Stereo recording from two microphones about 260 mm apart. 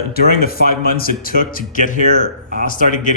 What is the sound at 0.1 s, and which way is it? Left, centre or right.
A man's voice, left.